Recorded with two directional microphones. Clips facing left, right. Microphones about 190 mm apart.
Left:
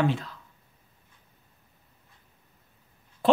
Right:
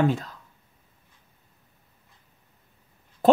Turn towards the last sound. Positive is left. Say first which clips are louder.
# right 3 dB
turn(degrees=-45)  # may be behind; listen again after turning